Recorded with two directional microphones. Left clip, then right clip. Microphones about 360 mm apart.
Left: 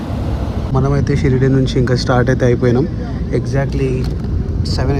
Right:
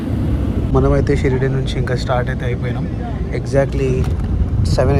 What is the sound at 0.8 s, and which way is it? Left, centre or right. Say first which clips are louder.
Speech: right 2 dB; centre.